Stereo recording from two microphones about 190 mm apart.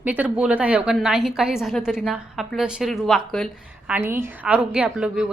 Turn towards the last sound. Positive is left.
turn(degrees=-5)  # may be behind; listen again after turning